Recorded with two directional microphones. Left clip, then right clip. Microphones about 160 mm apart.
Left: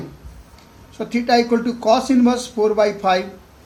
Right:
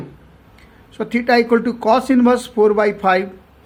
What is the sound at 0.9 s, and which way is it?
Speech, 50° right (ahead or behind).